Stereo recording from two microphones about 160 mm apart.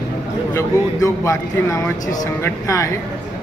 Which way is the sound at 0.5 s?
20° left (ahead or behind).